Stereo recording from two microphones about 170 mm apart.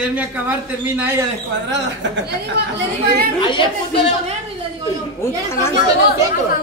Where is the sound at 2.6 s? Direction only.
70° right (ahead or behind).